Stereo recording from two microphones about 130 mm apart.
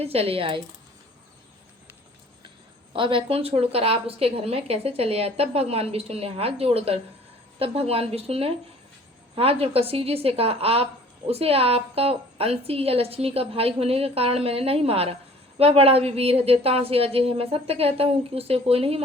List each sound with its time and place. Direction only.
0.0 s a woman's voice: 50° right (ahead or behind)
2.9 s a woman's voice: 40° right (ahead or behind)